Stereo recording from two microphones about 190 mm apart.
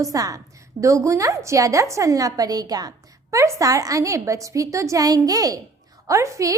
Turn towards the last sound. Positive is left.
turn(degrees=-15)  # may be behind; listen again after turning